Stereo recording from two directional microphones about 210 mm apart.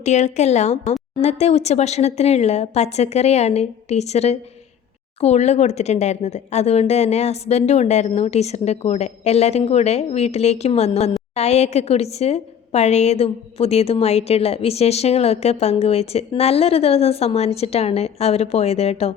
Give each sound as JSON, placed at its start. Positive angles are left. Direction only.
{"t": 0.0, "sound": "a woman's voice", "side_deg": 35}